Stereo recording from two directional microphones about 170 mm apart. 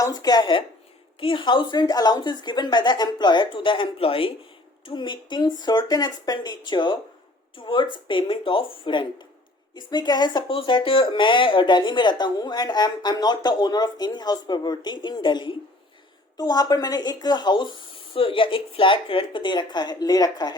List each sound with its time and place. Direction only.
0.0 s speech: 20° left (ahead or behind)